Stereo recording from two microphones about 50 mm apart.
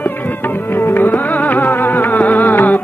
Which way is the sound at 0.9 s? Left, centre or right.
Left.